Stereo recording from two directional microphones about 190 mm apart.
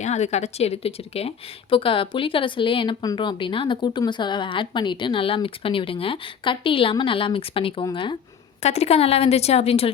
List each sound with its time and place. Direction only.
0.0 s a woman's voice: 35° left (ahead or behind)